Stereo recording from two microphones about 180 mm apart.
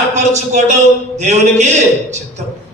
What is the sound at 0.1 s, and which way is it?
A man's voice, 40° right (ahead or behind).